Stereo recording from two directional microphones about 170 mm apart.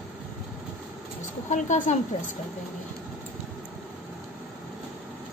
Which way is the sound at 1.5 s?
45° left (ahead or behind).